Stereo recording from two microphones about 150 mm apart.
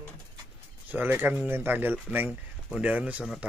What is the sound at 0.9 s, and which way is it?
Speech, 15° right (ahead or behind).